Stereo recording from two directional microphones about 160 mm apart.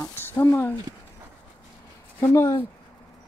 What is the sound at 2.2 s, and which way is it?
Speech, 15° left (ahead or behind).